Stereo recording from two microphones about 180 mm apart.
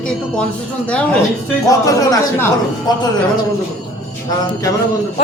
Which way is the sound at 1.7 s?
20° left (ahead or behind).